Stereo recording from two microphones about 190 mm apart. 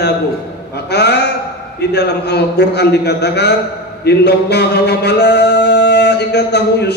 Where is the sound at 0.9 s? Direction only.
60° left (ahead or behind).